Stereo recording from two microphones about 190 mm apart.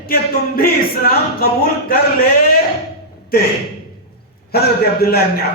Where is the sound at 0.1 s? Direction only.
50° left (ahead or behind).